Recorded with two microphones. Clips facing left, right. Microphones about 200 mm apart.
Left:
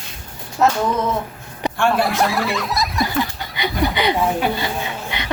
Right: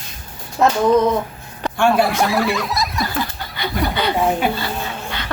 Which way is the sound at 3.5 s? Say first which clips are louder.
Left 1 dB; 15° left (ahead or behind).